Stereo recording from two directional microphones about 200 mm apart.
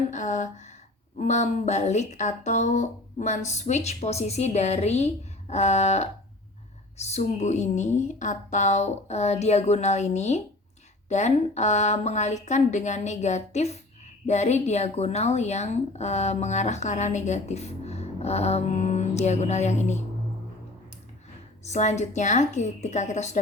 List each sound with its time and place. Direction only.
0.1 s a sound: 40° left (ahead or behind)
1.2 s speech: 35° left (ahead or behind)
21.6 s speech: 35° left (ahead or behind)